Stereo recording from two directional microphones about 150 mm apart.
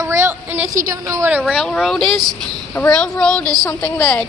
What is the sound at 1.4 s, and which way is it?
Speech, 5° left (ahead or behind).